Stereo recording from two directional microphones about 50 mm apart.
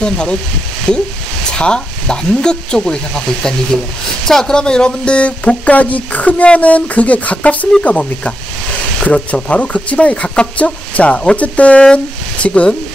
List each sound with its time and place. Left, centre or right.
0.0 s speech: centre
4.3 s speech: centre